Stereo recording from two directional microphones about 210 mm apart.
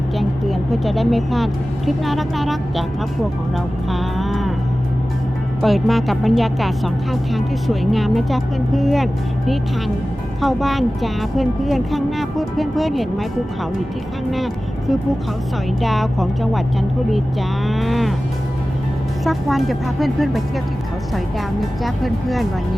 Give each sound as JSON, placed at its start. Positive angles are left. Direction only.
{"t": 0.2, "sound": "speech", "side_deg": 0}
{"t": 3.8, "sound": "music", "side_deg": 0}
{"t": 5.6, "sound": "speech", "side_deg": 0}
{"t": 10.4, "sound": "speech", "side_deg": 0}
{"t": 14.3, "sound": "speech", "side_deg": 0}
{"t": 17.7, "sound": "speech", "side_deg": 0}
{"t": 19.2, "sound": "speech", "side_deg": 0}
{"t": 21.8, "sound": "speech", "side_deg": 0}